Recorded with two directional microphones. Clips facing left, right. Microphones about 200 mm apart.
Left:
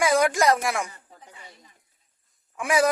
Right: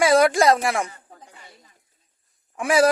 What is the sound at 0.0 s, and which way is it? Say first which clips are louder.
Speech: right 4 dB; 30° right (ahead or behind).